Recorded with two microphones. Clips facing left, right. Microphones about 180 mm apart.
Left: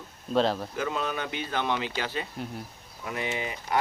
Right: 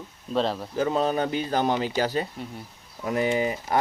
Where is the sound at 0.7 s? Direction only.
35° right (ahead or behind).